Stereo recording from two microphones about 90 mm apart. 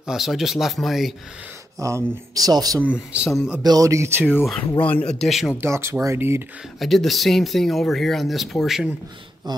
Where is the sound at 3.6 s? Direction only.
40° right (ahead or behind).